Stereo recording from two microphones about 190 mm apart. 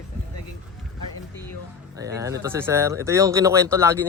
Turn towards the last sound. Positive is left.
turn(degrees=-15)  # may be behind; listen again after turning